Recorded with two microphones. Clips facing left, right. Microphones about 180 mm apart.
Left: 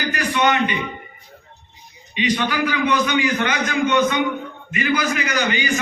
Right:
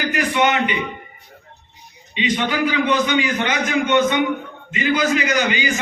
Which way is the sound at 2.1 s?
20° right (ahead or behind).